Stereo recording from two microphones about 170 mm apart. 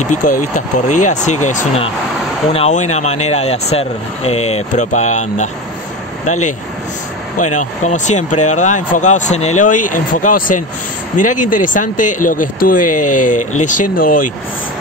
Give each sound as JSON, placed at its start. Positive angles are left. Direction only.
{"t": 0.0, "sound": "speech", "side_deg": 50}
{"t": 7.3, "sound": "speech", "side_deg": 45}